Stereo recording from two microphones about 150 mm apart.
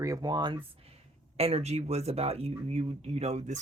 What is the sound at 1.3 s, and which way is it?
Speech, 45° right (ahead or behind).